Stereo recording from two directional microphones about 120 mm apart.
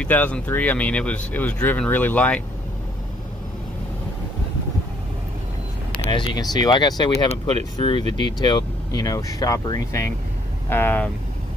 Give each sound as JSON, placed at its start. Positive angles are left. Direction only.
{"t": 0.0, "sound": "speech", "side_deg": 10}
{"t": 6.0, "sound": "speech", "side_deg": 35}
{"t": 10.7, "sound": "speech", "side_deg": 15}